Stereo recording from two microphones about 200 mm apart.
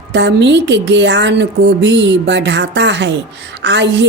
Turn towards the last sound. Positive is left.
turn(degrees=-60)  # may be behind; listen again after turning